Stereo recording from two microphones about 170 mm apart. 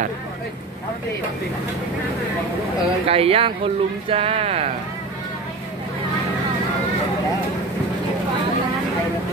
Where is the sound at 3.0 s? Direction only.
35° right (ahead or behind).